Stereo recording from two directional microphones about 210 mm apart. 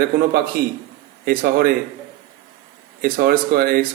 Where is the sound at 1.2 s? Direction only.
45° right (ahead or behind).